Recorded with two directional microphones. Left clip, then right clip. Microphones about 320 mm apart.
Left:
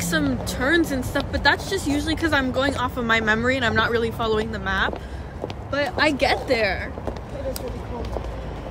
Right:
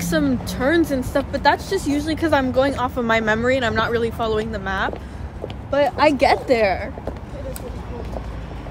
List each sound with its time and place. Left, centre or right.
0.0 s speech: centre